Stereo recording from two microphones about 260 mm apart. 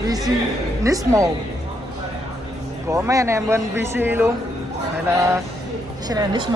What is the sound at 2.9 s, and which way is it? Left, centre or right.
Speech, centre.